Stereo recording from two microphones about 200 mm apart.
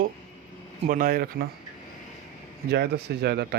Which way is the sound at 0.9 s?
45° right (ahead or behind).